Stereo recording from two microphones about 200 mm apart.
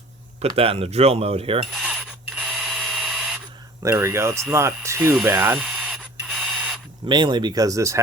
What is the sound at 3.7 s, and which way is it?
Speech, 15° right (ahead or behind).